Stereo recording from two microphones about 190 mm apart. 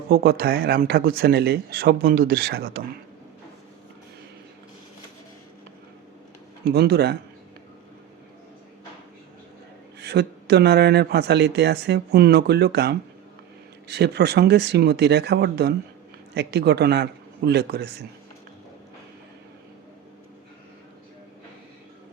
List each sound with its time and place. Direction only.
0.1 s speech: 50° right (ahead or behind)
6.7 s speech: 60° right (ahead or behind)
10.0 s speech: 60° right (ahead or behind)